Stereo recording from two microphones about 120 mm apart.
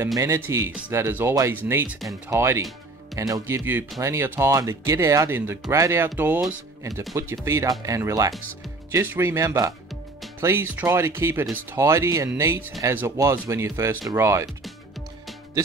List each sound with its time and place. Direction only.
0.1 s speech: 25° right (ahead or behind)
9.0 s speech: 15° right (ahead or behind)